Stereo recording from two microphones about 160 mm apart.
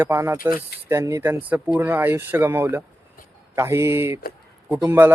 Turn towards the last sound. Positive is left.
turn(degrees=-15)  # may be behind; listen again after turning